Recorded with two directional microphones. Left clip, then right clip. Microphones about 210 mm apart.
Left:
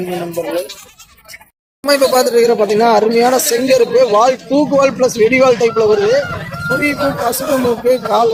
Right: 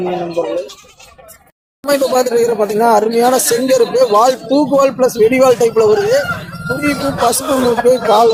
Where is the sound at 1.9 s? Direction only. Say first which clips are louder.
Left 1 dB; 5° right (ahead or behind).